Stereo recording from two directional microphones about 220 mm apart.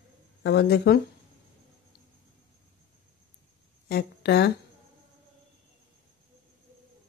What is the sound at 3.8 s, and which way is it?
Speech, 45° left (ahead or behind).